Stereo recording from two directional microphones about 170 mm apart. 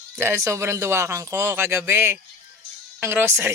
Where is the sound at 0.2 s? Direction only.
15° right (ahead or behind).